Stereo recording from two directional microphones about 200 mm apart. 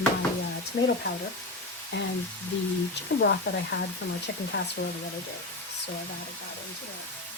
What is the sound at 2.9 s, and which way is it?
Speech, 60° left (ahead or behind).